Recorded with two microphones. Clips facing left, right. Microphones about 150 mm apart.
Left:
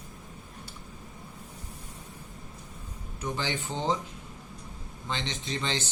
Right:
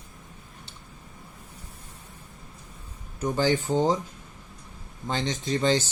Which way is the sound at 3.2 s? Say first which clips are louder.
Right 9 dB; 45° right (ahead or behind).